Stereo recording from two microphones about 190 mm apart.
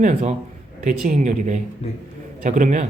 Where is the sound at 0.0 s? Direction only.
35° right (ahead or behind).